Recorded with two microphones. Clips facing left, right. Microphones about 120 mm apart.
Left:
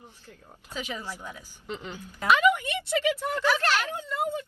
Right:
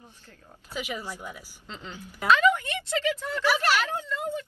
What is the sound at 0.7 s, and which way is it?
Speech, 10° right (ahead or behind).